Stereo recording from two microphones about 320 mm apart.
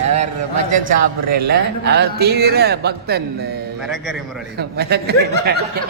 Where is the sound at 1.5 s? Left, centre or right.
Right.